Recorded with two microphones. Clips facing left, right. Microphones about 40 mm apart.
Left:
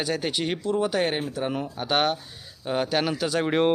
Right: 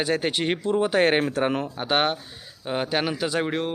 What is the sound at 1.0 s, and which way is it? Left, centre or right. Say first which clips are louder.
Speech: right 5 dB; right.